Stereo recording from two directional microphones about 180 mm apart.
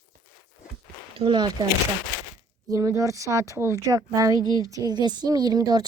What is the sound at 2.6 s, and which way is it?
A woman's voice, 20° right (ahead or behind).